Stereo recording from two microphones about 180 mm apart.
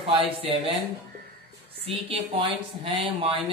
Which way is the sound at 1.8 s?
30° right (ahead or behind).